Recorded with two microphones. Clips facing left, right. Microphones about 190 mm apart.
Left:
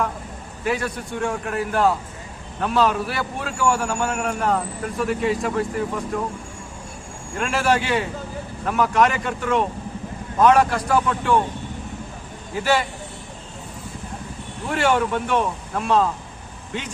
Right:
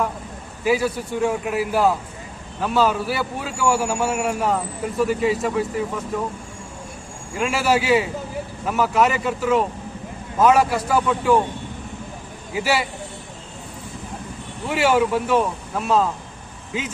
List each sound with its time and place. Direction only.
0.6 s a man's voice: 5° right (ahead or behind)
7.3 s a man's voice: 5° right (ahead or behind)
12.5 s a man's voice: 5° right (ahead or behind)
14.7 s a man's voice: 5° right (ahead or behind)